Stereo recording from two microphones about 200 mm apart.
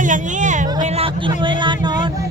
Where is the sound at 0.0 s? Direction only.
40° right (ahead or behind).